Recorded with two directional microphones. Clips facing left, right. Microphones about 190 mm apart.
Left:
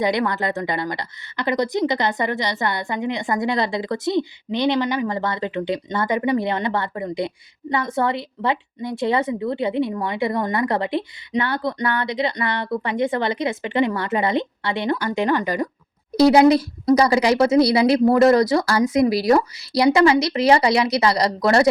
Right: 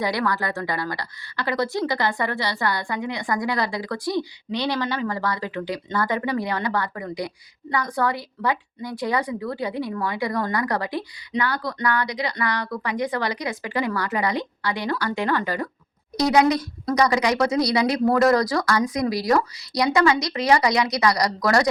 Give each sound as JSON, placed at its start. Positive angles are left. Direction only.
{"t": 0.0, "sound": "speech", "side_deg": 20}
{"t": 16.1, "sound": "speech", "side_deg": 30}